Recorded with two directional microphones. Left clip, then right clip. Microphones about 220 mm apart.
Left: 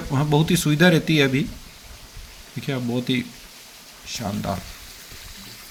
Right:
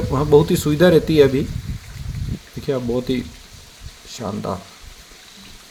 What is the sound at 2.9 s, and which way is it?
Speech, 25° left (ahead or behind).